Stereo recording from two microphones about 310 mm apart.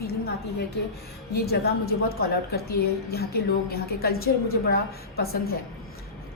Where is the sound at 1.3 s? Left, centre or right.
Left.